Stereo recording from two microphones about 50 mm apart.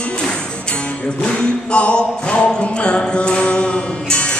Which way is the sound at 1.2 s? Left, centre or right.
Centre.